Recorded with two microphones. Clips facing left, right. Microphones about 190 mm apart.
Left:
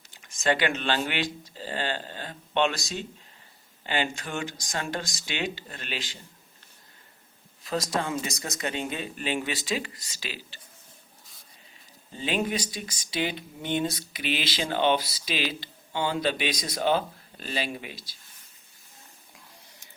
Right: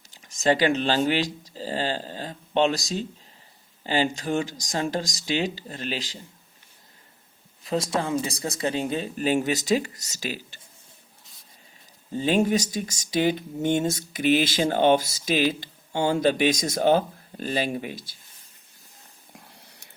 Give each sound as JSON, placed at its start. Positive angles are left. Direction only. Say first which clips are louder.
{"t": 0.1, "sound": "speech", "louder": "right 4 dB", "side_deg": -40}
{"t": 7.6, "sound": "speech", "louder": "right 3 dB", "side_deg": -30}
{"t": 12.1, "sound": "speech", "louder": "right 7 dB", "side_deg": -45}